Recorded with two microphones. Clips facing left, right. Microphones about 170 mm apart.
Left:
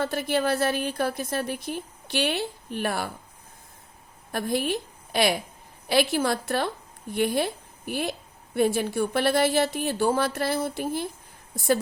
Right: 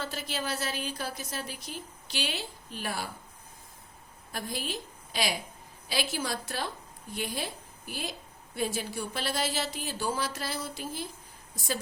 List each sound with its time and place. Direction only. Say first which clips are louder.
0.0 s a woman's voice: left 10 dB; 55° left (ahead or behind)
4.3 s a woman's voice: left 10 dB; 60° left (ahead or behind)